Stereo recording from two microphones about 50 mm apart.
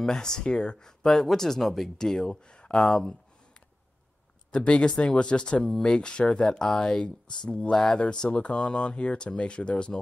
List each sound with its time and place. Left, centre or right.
0.0 s speech: centre
4.5 s speech: centre